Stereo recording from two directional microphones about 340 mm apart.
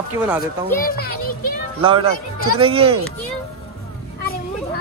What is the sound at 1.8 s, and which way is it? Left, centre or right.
Speech, centre.